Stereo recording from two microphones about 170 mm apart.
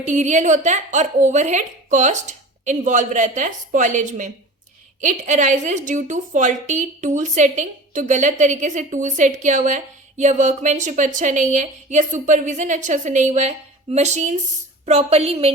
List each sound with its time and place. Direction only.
0.1 s a woman's voice: 45° right (ahead or behind)